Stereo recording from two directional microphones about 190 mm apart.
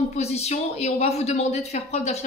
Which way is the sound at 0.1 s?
35° left (ahead or behind).